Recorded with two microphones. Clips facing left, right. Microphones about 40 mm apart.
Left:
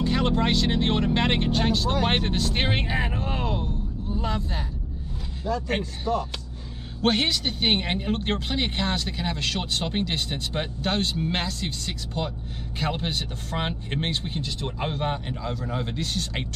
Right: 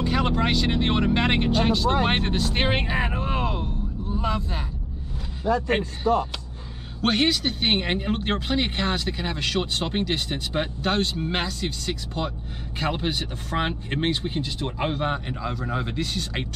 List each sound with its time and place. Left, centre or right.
0.0 s speech: centre
5.7 s speech: right
7.0 s speech: centre